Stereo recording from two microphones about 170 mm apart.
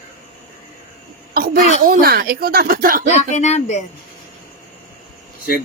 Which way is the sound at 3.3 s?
40° left (ahead or behind).